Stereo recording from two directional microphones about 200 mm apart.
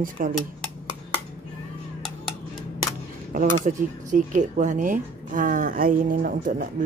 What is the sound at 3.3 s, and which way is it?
Speech, 40° right (ahead or behind).